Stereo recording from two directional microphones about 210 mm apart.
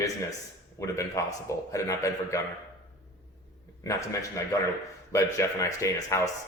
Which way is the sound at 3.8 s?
15° left (ahead or behind).